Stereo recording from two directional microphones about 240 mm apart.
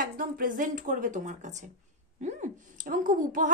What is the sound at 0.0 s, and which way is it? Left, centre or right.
A woman's voice, right.